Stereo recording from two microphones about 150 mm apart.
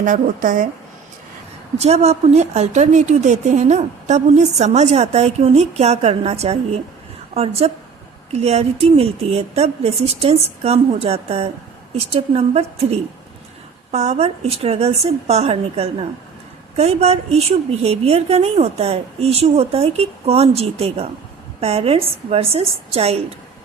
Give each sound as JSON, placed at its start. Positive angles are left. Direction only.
{"t": 0.0, "sound": "a woman's voice", "side_deg": -60}
{"t": 1.8, "sound": "a woman's voice", "side_deg": -45}